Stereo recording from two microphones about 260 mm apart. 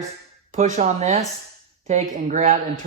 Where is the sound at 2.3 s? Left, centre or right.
Right.